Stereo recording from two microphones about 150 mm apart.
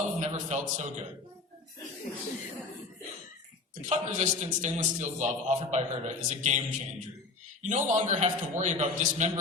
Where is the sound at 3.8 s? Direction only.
55° right (ahead or behind).